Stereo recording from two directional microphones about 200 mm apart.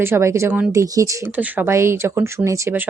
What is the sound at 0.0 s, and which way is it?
Speech, 15° right (ahead or behind).